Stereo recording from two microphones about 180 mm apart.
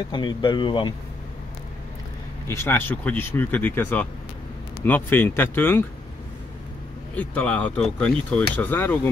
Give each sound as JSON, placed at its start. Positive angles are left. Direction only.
{"t": 0.1, "sound": "speech", "side_deg": 25}
{"t": 2.4, "sound": "speech", "side_deg": 15}
{"t": 7.2, "sound": "speech", "side_deg": 10}